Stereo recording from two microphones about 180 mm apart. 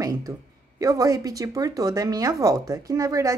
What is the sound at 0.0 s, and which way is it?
Speech, 15° right (ahead or behind).